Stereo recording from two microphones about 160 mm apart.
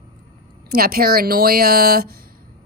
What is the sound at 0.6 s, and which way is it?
Speech, 70° right (ahead or behind).